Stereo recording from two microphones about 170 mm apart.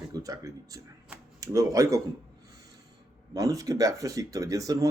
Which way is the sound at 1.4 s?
20° right (ahead or behind).